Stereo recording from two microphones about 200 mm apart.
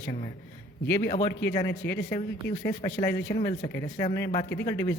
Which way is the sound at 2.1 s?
20° left (ahead or behind).